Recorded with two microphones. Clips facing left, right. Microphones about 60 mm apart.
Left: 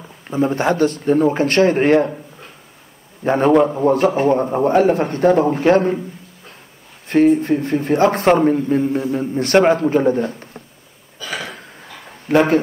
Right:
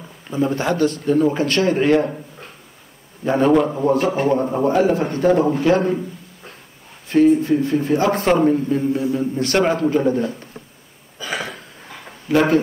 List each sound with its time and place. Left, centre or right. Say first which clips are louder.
0.6 s a man's voice: left 2 dB; left
3.3 s a man's voice: left 2 dB; left
4.6 s a man's voice: left 3 dB; left
7.1 s a man's voice: left 1 dB; left
12.3 s a man's voice: left 2 dB; left